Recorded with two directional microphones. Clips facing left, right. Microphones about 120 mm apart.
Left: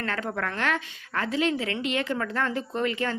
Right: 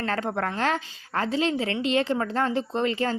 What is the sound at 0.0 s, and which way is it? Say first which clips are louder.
A woman's voice: right 3 dB; 30° right (ahead or behind).